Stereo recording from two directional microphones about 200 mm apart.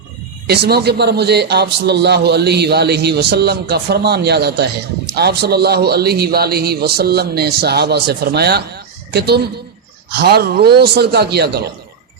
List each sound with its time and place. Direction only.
0.4 s a man's voice: 55° right (ahead or behind)